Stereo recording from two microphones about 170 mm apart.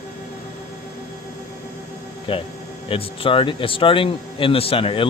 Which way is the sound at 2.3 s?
30° left (ahead or behind).